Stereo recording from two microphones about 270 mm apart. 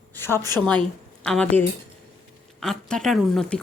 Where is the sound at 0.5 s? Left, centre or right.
Centre.